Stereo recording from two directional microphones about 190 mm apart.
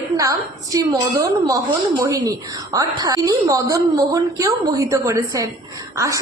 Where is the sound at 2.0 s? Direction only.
20° right (ahead or behind).